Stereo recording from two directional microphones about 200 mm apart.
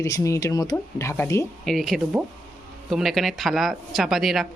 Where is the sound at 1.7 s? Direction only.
Centre (ahead or behind).